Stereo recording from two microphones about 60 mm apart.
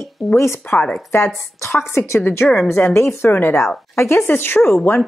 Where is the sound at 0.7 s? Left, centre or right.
Left.